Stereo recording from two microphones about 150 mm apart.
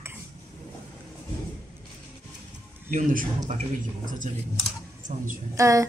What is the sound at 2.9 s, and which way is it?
Speech, 65° right (ahead or behind).